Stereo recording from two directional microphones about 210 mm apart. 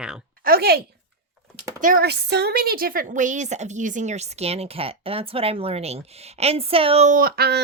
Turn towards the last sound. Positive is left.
turn(degrees=-50)  # may be behind; listen again after turning